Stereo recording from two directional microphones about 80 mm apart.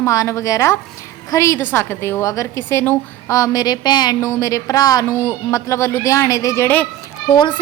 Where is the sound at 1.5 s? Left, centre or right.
Left.